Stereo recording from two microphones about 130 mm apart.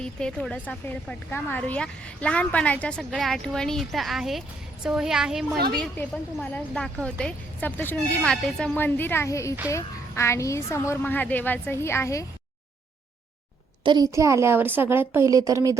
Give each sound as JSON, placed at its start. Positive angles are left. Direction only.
{"t": 0.0, "sound": "a woman's voice", "side_deg": 5}
{"t": 5.8, "sound": "a woman's voice", "side_deg": 10}
{"t": 13.8, "sound": "a woman's voice", "side_deg": -30}